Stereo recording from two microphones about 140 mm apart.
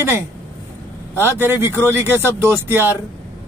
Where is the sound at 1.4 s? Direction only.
15° right (ahead or behind).